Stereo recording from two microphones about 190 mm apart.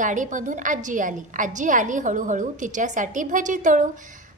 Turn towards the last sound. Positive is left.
turn(degrees=-40)  # may be behind; listen again after turning